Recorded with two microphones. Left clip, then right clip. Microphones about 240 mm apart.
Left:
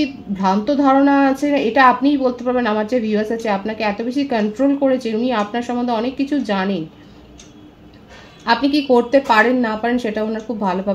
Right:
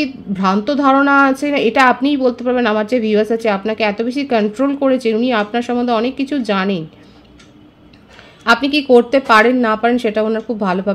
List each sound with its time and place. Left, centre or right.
0.0 s a woman's voice: right
8.5 s a woman's voice: right